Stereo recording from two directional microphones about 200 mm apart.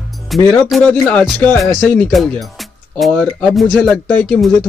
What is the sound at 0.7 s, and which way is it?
Speech, 5° left (ahead or behind).